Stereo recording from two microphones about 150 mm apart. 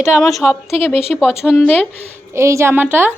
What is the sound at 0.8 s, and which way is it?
A woman's voice, 15° left (ahead or behind).